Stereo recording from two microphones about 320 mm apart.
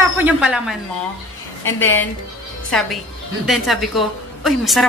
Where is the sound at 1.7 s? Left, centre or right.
Centre.